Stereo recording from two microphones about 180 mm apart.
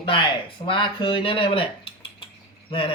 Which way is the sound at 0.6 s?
30° left (ahead or behind).